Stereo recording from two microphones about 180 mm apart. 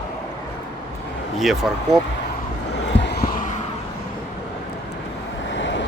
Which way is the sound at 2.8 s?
75° left (ahead or behind).